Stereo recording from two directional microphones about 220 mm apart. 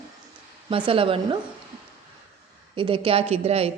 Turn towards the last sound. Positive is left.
turn(degrees=-25)  # may be behind; listen again after turning